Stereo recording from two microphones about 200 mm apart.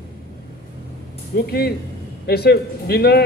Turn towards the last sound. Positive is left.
turn(degrees=55)  # may be behind; listen again after turning